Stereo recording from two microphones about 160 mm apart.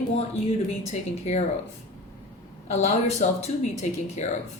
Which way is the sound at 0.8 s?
45° left (ahead or behind).